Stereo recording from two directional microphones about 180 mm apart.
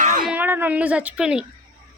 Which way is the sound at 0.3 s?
10° right (ahead or behind).